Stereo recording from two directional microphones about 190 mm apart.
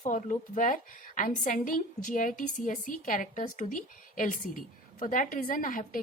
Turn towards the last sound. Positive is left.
turn(degrees=45)  # may be behind; listen again after turning